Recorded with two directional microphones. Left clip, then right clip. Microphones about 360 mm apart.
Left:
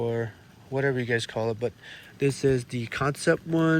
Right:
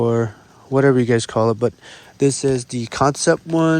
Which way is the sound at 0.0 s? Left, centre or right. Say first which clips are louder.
Right 10 dB; right.